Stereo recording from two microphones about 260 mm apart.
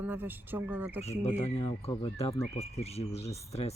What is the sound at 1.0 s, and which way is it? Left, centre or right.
Speech, left.